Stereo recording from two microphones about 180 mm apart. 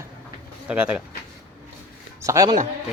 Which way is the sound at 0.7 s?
5° right (ahead or behind).